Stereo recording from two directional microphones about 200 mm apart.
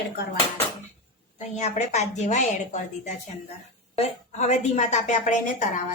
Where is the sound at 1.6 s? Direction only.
35° left (ahead or behind).